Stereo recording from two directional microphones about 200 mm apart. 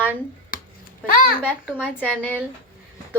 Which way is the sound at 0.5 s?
50° left (ahead or behind).